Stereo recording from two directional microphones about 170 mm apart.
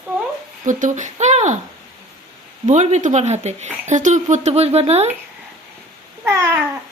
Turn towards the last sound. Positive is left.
turn(degrees=-15)  # may be behind; listen again after turning